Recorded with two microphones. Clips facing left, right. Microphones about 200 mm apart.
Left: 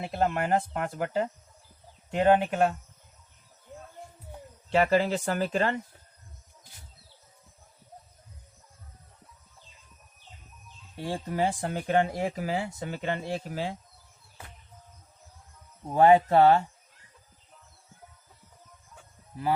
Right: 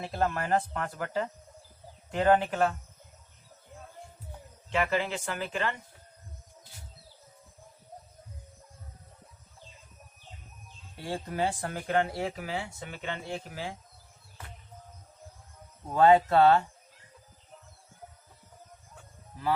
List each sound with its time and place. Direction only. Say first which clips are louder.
0.0 s speech: left 3 dB; 20° left (ahead or behind)
4.7 s speech: left 6 dB; 35° left (ahead or behind)
11.1 s speech: left 2 dB; 15° left (ahead or behind)
12.4 s speech: left 5 dB; 35° left (ahead or behind)
15.9 s speech: left 2 dB; 15° left (ahead or behind)